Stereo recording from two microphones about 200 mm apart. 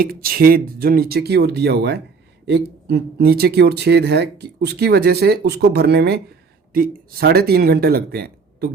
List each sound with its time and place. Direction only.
0.0 s speech: 45° right (ahead or behind)